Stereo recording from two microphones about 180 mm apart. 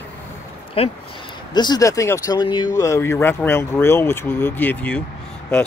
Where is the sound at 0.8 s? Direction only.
30° left (ahead or behind).